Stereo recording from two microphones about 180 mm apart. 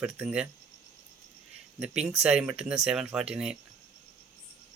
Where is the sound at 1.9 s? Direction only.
35° right (ahead or behind).